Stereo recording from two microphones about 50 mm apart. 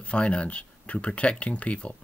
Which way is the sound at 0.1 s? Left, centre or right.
Left.